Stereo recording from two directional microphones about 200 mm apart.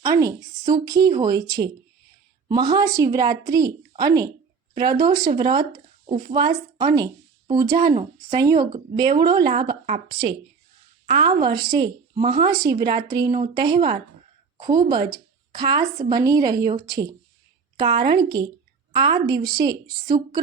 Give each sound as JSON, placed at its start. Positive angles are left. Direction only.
{"t": 0.0, "sound": "a woman's voice", "side_deg": -15}